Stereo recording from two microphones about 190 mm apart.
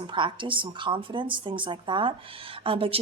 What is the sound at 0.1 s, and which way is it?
Speech, 25° right (ahead or behind).